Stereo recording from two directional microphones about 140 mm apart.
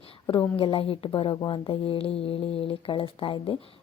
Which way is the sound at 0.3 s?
40° left (ahead or behind).